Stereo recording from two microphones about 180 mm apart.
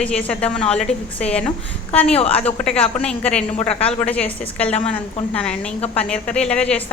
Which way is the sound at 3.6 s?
35° left (ahead or behind).